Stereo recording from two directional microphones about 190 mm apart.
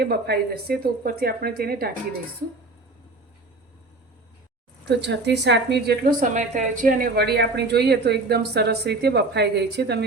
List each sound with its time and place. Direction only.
0.0 s a woman's voice: 55° right (ahead or behind)
4.9 s a woman's voice: 65° right (ahead or behind)